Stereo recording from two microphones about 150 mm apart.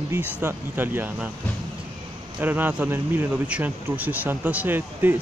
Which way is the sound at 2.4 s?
10° right (ahead or behind).